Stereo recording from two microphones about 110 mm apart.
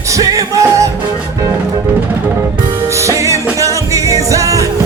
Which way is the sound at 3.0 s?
30° right (ahead or behind).